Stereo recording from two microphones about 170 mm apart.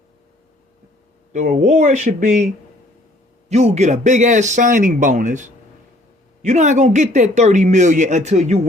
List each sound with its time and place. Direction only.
1.3 s speech: 45° right (ahead or behind)
3.5 s speech: 40° right (ahead or behind)